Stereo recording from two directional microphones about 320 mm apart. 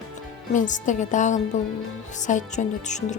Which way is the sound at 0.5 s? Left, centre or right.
Left.